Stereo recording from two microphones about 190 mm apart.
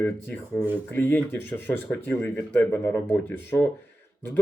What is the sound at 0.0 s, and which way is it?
Speech, 10° left (ahead or behind).